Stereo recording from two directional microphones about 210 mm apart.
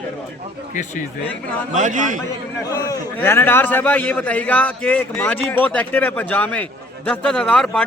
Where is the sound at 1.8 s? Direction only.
35° right (ahead or behind).